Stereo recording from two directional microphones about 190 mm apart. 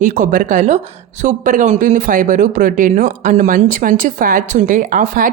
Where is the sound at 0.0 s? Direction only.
45° right (ahead or behind).